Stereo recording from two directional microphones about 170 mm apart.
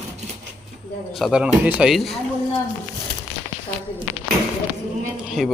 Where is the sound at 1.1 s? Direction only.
Centre (ahead or behind).